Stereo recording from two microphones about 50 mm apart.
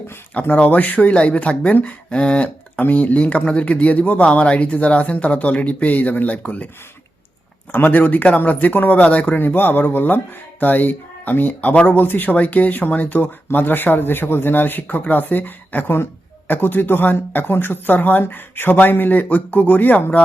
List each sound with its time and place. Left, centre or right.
0.4 s speech: left
2.1 s a sound: left
2.9 s speech: left
7.9 s speech: left
9.4 s speech: left